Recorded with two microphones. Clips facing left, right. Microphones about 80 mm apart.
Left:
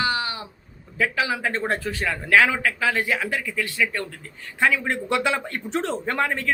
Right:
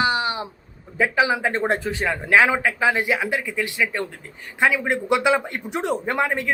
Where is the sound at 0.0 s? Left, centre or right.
Right.